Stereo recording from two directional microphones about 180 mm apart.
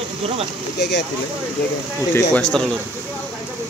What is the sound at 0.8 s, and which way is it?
Speech, 75° left (ahead or behind).